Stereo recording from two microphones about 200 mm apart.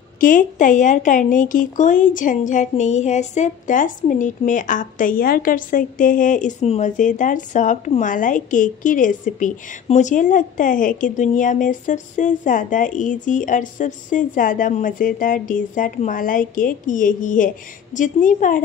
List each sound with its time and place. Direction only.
0.2 s speech: 40° left (ahead or behind)